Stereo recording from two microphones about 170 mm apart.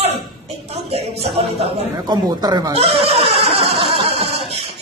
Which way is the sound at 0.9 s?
40° right (ahead or behind).